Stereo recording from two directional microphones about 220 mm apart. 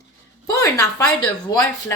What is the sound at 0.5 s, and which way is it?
Speech, 15° left (ahead or behind).